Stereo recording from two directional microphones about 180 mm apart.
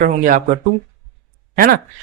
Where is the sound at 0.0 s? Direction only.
50° right (ahead or behind).